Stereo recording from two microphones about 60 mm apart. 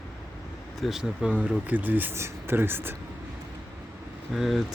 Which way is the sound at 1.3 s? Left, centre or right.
Right.